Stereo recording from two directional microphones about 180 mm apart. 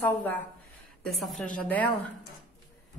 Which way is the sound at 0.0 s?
10° left (ahead or behind).